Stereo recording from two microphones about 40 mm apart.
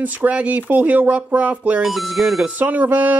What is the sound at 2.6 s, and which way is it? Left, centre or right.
Music, right.